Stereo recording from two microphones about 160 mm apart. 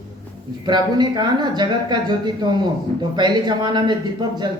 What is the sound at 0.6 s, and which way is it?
Speech, 25° right (ahead or behind).